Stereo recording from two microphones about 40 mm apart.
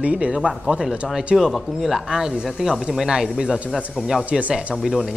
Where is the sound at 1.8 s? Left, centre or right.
Centre.